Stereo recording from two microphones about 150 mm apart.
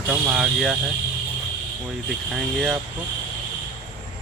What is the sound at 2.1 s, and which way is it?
Speech, centre (ahead or behind).